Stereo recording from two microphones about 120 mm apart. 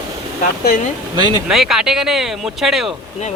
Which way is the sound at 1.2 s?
35° right (ahead or behind).